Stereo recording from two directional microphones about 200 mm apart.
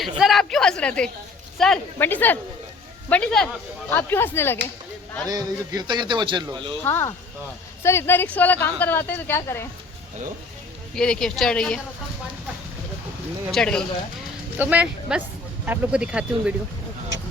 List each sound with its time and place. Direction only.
0.2 s a woman's voice: centre (ahead or behind)
5.2 s a man's voice: 20° right (ahead or behind)
6.8 s a woman's voice: 10° left (ahead or behind)
10.9 s speech: 5° left (ahead or behind)
13.5 s speech: 5° left (ahead or behind)
14.6 s speech: 5° right (ahead or behind)